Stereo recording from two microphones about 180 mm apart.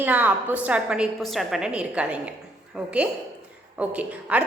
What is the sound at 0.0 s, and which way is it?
A woman's voice, 10° right (ahead or behind).